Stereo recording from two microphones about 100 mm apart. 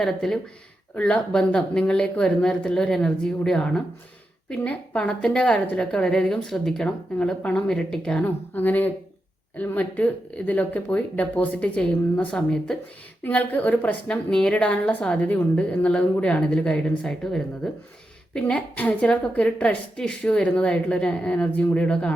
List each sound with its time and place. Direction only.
0.0 s a woman's voice: 5° left (ahead or behind)
8.2 s a woman's voice: 15° left (ahead or behind)